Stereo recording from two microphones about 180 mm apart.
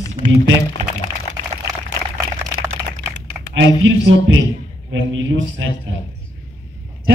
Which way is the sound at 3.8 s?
90° right.